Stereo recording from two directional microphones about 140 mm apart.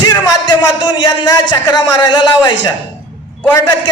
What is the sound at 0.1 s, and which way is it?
Speech, 30° left (ahead or behind).